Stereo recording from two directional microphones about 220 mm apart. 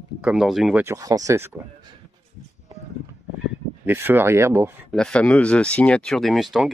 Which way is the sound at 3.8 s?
10° right (ahead or behind).